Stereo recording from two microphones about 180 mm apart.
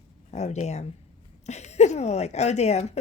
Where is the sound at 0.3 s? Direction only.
40° left (ahead or behind).